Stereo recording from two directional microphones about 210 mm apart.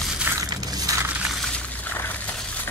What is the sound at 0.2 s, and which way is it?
Crushing, 15° right (ahead or behind).